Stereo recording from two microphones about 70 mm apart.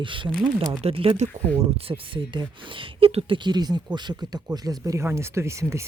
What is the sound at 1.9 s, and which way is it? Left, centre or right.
Speech, right.